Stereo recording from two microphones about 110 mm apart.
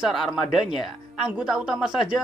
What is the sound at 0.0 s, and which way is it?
A woman's voice, 5° right (ahead or behind).